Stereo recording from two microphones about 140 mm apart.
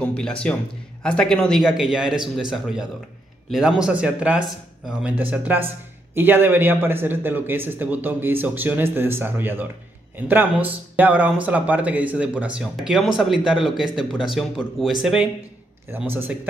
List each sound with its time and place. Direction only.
0.0 s a man's voice: 10° left (ahead or behind)
15.9 s a man's voice: 15° right (ahead or behind)